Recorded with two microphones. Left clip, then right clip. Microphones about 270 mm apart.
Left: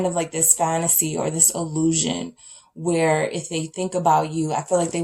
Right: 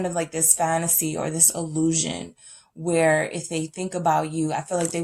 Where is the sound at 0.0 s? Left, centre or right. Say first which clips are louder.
Left 3 dB; right.